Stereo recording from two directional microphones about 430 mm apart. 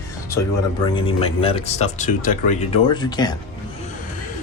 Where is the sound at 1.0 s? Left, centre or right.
Centre.